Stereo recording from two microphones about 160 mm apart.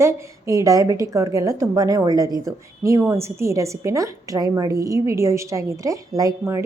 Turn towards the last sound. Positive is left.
turn(degrees=-20)  # may be behind; listen again after turning